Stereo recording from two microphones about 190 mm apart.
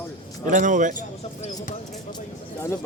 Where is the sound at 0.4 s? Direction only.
40° right (ahead or behind).